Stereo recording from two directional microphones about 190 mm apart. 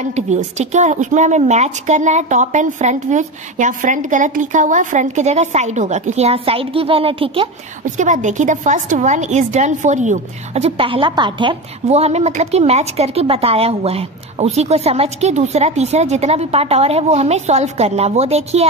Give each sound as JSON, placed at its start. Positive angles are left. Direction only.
{"t": 0.1, "sound": "a woman's voice", "side_deg": -35}
{"t": 7.8, "sound": "a woman's voice", "side_deg": -40}